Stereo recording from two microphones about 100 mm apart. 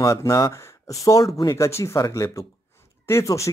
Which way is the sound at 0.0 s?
30° left (ahead or behind).